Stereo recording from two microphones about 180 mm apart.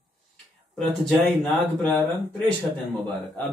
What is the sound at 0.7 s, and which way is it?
Speech, 5° left (ahead or behind).